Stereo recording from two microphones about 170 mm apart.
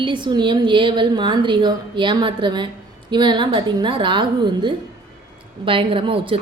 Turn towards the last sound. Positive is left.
turn(degrees=-30)  # may be behind; listen again after turning